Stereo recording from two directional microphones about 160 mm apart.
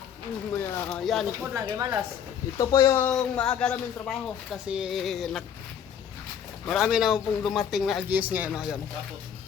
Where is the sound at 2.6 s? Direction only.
20° left (ahead or behind).